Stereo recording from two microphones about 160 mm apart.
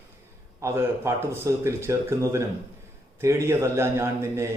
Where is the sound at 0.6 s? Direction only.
15° right (ahead or behind).